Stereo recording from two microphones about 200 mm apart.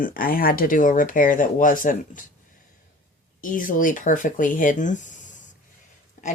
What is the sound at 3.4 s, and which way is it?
Speech, 40° left (ahead or behind).